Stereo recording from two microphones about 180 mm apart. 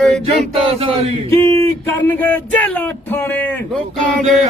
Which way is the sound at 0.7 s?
30° right (ahead or behind).